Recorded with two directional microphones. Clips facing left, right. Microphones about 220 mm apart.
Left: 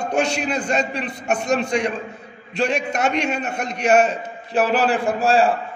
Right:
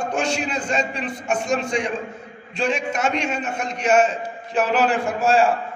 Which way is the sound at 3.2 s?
65° left (ahead or behind).